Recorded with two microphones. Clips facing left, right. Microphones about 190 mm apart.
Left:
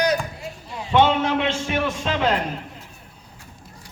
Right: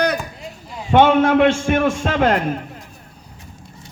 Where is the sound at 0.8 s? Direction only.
55° right (ahead or behind).